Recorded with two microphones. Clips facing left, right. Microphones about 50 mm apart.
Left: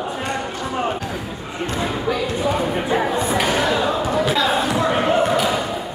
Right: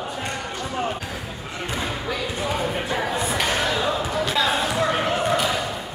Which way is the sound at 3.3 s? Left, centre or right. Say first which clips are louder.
Left 4 dB; centre.